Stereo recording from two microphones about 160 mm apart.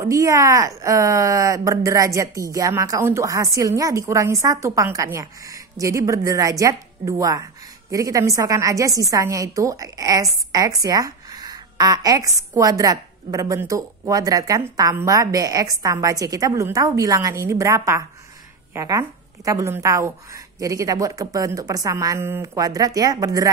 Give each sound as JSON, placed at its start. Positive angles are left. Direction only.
{"t": 0.0, "sound": "a woman's voice", "side_deg": -20}